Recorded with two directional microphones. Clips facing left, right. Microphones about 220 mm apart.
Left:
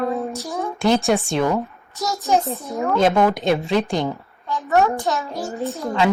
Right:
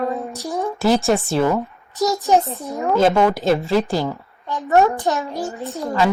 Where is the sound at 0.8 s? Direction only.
Centre (ahead or behind).